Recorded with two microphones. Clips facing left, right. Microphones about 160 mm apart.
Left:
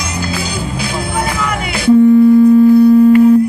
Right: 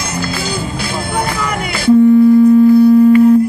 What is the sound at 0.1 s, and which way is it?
Music, 10° left (ahead or behind).